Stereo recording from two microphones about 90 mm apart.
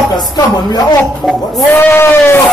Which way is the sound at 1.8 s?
30° left (ahead or behind).